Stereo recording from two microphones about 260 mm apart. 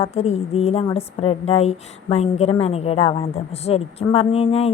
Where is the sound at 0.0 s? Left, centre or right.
Left.